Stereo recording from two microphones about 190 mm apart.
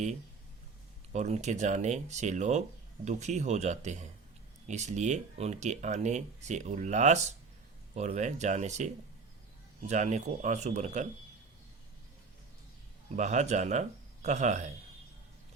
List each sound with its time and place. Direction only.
1.1 s speech: 35° right (ahead or behind)
9.9 s speech: 35° right (ahead or behind)
13.1 s speech: 40° right (ahead or behind)